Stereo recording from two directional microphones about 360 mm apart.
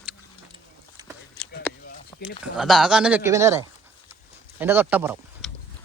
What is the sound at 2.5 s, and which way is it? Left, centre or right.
Speech, centre.